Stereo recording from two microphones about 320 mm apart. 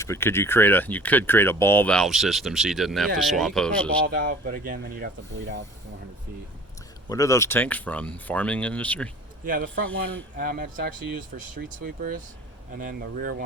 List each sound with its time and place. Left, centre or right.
0.0 s speech: centre
4.0 s speech: right
7.1 s speech: centre
9.4 s speech: right